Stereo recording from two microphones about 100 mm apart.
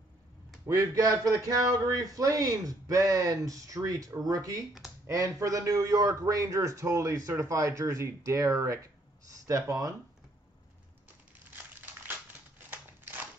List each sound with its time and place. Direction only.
0.7 s a man's voice: 35° right (ahead or behind)
11.5 s crushing: 20° right (ahead or behind)
12.6 s a sound: 20° right (ahead or behind)